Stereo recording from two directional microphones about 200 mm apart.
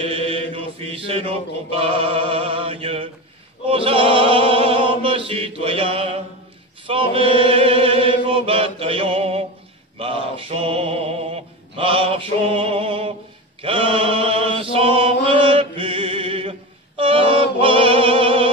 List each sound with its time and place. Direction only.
0.0 s mantra: 30° right (ahead or behind)
1.7 s chant: 30° right (ahead or behind)
9.9 s male singing: 25° right (ahead or behind)
13.6 s mantra: 25° right (ahead or behind)
17.6 s music: 25° right (ahead or behind)